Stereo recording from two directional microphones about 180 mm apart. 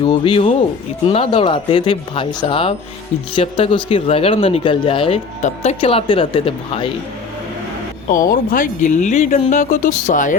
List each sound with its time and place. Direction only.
0.0 s speech: 30° left (ahead or behind)
8.0 s speech: 50° left (ahead or behind)